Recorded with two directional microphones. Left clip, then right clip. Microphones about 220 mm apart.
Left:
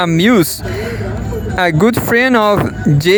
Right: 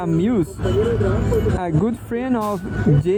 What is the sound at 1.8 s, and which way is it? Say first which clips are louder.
Speech: left 12 dB; 40° left (ahead or behind).